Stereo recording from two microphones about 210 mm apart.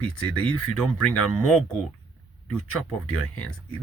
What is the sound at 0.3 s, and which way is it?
Speech, 90° left.